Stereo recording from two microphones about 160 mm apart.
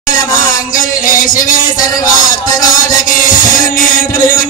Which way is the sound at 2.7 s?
55° left (ahead or behind).